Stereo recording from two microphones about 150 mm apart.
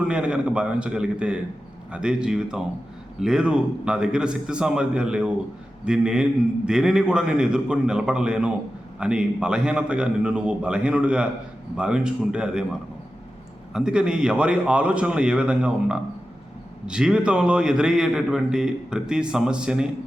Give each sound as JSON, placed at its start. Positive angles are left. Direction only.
{"t": 0.1, "sound": "a man's voice", "side_deg": -5}
{"t": 13.7, "sound": "a man's voice", "side_deg": -5}